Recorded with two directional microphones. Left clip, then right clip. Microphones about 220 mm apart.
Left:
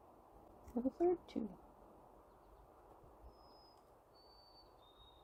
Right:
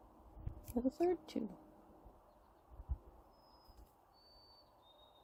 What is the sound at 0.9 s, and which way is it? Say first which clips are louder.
Speech: even; 45° right (ahead or behind).